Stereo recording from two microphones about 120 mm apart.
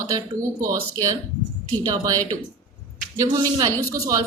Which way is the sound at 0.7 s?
30° right (ahead or behind).